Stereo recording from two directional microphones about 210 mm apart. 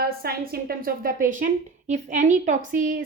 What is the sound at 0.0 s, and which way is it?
A woman's voice, 45° right (ahead or behind).